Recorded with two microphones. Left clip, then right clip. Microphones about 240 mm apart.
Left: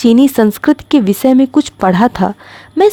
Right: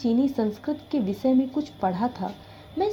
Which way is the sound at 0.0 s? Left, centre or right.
Left.